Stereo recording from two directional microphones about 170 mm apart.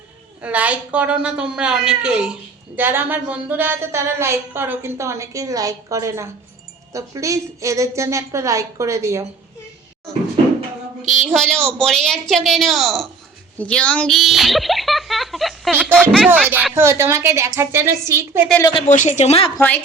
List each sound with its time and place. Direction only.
0.4 s speech: 10° right (ahead or behind)
11.0 s speech: 45° right (ahead or behind)
11.3 s a child's voice: 5° left (ahead or behind)
16.0 s speech: 5° left (ahead or behind)
16.3 s speech: 10° right (ahead or behind)
18.9 s a woman's voice: 45° left (ahead or behind)
19.5 s a woman's voice: 10° left (ahead or behind)